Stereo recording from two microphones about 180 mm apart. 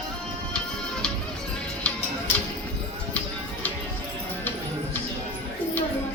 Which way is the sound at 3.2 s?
5° left (ahead or behind).